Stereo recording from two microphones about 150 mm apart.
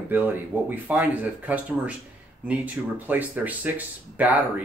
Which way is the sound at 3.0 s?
10° right (ahead or behind).